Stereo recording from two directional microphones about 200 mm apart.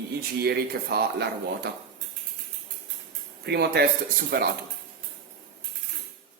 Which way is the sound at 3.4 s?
55° right (ahead or behind).